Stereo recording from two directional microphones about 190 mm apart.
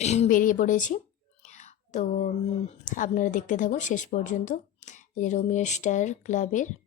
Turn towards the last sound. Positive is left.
turn(degrees=40)  # may be behind; listen again after turning